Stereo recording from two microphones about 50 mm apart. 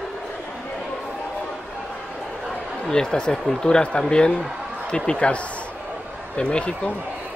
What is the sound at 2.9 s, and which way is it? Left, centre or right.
Speech, centre.